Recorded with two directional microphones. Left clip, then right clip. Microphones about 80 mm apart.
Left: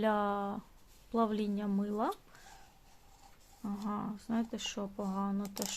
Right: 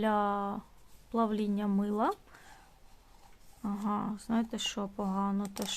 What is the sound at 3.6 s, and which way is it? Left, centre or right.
Speech, right.